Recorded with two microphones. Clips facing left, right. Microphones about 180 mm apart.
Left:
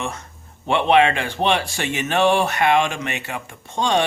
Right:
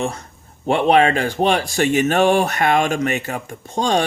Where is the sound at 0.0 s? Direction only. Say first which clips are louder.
Right 5 dB; 35° right (ahead or behind).